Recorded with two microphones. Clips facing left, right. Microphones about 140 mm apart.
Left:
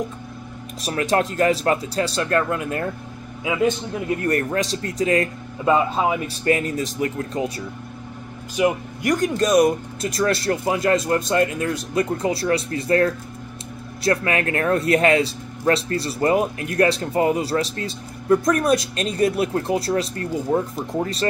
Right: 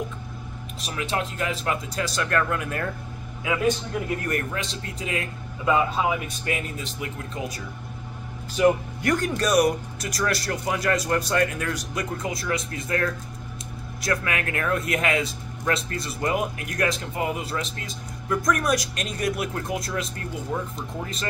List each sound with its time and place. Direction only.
0.8 s speech: 45° left (ahead or behind); by 3.7 s 20° left (ahead or behind)
4.3 s speech: 40° left (ahead or behind)
6.4 s speech: 40° left (ahead or behind)
8.5 s speech: 15° left (ahead or behind); by 21.3 s 35° left (ahead or behind)